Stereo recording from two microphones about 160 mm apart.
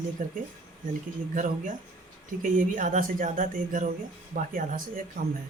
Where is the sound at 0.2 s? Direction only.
55° right (ahead or behind).